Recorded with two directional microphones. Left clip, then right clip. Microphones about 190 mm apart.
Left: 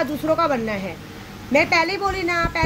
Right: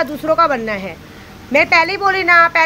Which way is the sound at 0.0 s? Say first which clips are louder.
Right 6 dB; 15° left (ahead or behind).